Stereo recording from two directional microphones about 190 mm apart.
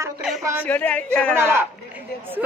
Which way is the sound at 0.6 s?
10° left (ahead or behind).